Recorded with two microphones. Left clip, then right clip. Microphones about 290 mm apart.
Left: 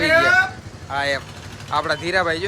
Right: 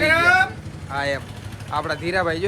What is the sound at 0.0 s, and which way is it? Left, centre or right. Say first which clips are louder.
Vehicle: left 1 dB; centre.